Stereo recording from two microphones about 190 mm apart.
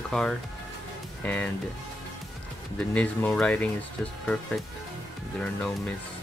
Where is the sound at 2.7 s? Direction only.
5° left (ahead or behind).